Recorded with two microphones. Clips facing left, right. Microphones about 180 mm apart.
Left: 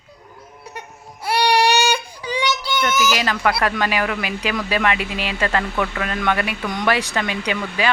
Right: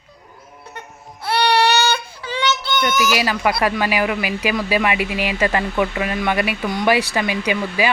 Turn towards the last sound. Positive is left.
turn(degrees=-10)  # may be behind; listen again after turning